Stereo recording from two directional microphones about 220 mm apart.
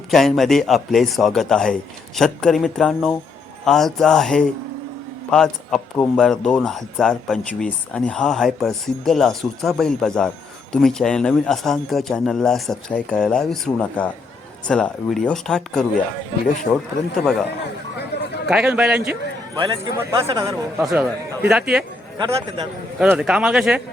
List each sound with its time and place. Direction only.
0.1 s a man's voice: centre (ahead or behind)
18.4 s a man's voice: 5° right (ahead or behind)
19.5 s a man's voice: 20° right (ahead or behind)
20.7 s a man's voice: 5° right (ahead or behind)
22.2 s a man's voice: 25° right (ahead or behind)
23.0 s a man's voice: 5° right (ahead or behind)